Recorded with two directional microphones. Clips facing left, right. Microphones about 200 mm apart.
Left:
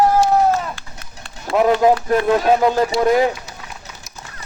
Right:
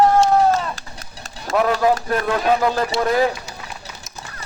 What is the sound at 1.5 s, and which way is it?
Speech, 20° left (ahead or behind).